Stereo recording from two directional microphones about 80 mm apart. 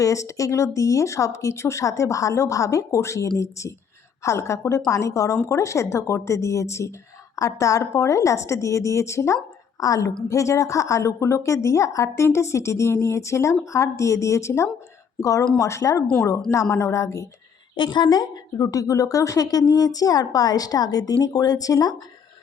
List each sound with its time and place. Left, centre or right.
0.0 s a woman's voice: left
17.7 s a woman's voice: left
18.5 s speech: left